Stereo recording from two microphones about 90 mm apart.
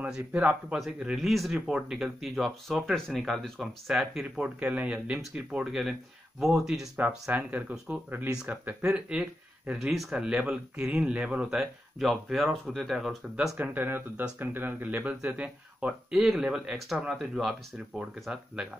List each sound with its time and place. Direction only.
0.0 s speech: 15° right (ahead or behind)
7.0 s speech: 15° right (ahead or behind)
13.6 s speech: 20° right (ahead or behind)